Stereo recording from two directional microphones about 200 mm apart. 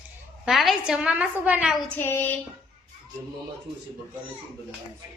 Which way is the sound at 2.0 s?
10° left (ahead or behind).